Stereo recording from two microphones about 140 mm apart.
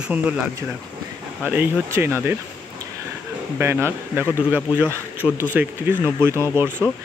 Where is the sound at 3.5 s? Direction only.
15° right (ahead or behind).